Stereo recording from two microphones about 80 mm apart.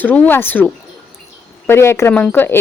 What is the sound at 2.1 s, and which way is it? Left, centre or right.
Speech, centre.